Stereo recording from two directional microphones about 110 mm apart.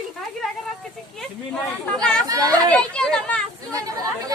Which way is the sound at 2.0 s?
5° left (ahead or behind).